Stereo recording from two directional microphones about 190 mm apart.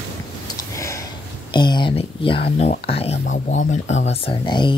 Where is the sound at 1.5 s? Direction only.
25° left (ahead or behind).